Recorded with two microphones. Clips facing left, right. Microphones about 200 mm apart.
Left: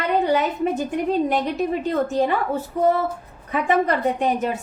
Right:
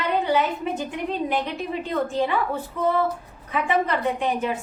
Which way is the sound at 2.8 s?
40° left (ahead or behind).